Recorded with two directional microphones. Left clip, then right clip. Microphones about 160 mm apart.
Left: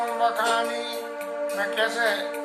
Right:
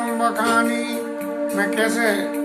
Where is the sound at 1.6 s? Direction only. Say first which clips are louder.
Right 4 dB; 20° right (ahead or behind).